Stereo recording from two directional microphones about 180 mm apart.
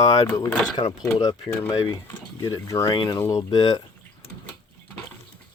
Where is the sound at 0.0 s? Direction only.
20° left (ahead or behind).